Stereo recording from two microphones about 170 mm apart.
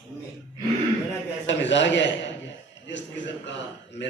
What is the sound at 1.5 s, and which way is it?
Speech, 90° left.